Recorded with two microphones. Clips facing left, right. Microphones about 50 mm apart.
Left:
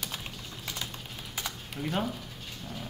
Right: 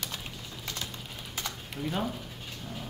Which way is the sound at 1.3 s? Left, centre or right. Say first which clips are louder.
Even; centre.